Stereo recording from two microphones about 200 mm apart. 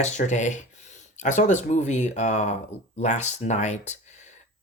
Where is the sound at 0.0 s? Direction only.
35° left (ahead or behind).